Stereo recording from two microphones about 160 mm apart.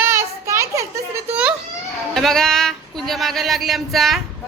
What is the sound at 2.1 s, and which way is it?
Speech, centre (ahead or behind).